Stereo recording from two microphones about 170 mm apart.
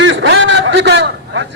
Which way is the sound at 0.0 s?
90° right.